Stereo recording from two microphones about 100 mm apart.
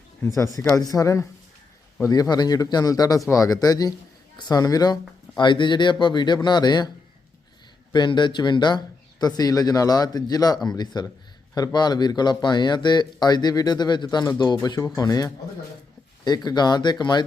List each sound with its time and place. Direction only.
0.3 s a man's voice: 35° left (ahead or behind)
5.4 s speech: 50° left (ahead or behind)
7.9 s a man's voice: 50° left (ahead or behind)